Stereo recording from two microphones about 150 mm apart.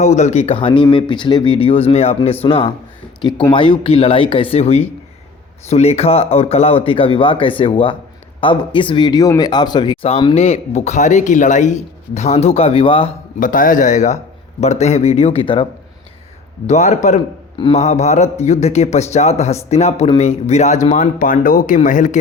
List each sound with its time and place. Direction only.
0.0 s speech: 50° left (ahead or behind)
13.4 s speech: 60° left (ahead or behind); by 15.6 s 35° left (ahead or behind)
16.6 s speech: 50° left (ahead or behind)